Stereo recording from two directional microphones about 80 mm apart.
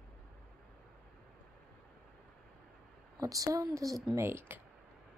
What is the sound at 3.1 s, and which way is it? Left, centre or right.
Speech, right.